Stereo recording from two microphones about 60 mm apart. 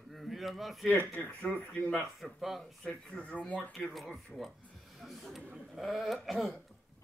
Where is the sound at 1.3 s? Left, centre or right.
Left.